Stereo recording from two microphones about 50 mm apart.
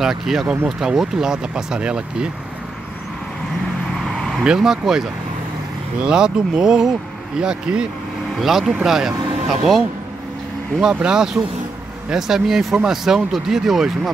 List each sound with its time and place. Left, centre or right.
0.0 s speech: centre
4.6 s speech: centre
6.0 s speech: centre
8.4 s speech: centre